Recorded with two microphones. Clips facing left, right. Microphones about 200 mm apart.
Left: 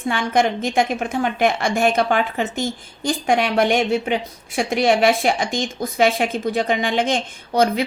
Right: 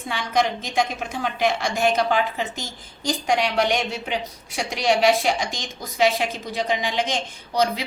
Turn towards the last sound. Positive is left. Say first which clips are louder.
# left 5 dB
turn(degrees=55)  # may be behind; listen again after turning